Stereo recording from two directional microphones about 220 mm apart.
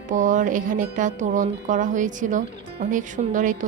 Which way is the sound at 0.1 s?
35° right (ahead or behind).